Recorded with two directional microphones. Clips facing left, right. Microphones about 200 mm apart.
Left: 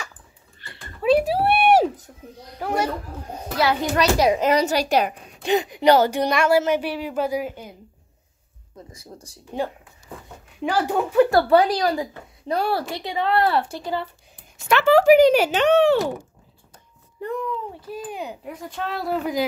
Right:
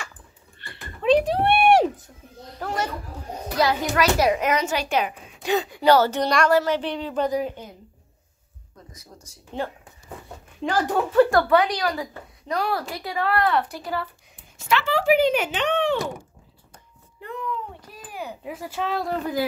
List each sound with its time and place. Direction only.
1.0 s a sound: 5° left (ahead or behind)
3.5 s a child's voice: 25° left (ahead or behind)
5.4 s a woman's voice: 20° left (ahead or behind)
8.9 s a child's voice: 30° left (ahead or behind)
10.6 s a woman's voice: 10° left (ahead or behind)
11.2 s a woman's voice: 25° left (ahead or behind)
14.7 s speech: 50° left (ahead or behind)
18.1 s a woman's voice: 20° left (ahead or behind)
18.4 s speech: 5° right (ahead or behind)